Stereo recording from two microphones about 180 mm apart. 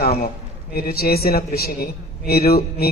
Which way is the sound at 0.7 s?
60° left (ahead or behind).